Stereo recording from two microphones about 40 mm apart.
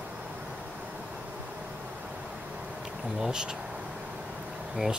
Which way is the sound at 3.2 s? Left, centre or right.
Centre.